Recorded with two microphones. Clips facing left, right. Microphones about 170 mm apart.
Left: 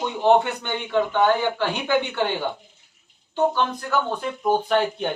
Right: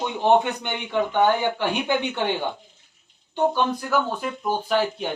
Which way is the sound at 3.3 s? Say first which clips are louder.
Even; 10° right (ahead or behind).